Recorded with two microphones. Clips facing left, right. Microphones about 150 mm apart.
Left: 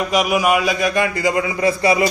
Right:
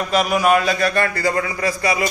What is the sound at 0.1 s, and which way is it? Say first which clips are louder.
A man's voice: right 1 dB; 10° left (ahead or behind).